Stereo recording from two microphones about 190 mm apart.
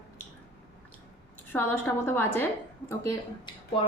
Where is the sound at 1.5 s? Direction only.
10° left (ahead or behind).